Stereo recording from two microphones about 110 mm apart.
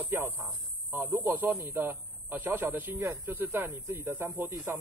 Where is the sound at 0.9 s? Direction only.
20° right (ahead or behind).